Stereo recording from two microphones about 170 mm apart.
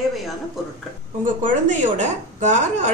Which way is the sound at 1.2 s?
50° right (ahead or behind).